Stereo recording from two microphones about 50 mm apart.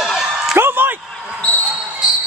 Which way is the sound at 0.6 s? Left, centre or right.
Right.